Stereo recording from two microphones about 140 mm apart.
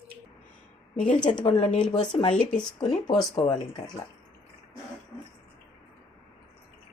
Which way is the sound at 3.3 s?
30° left (ahead or behind).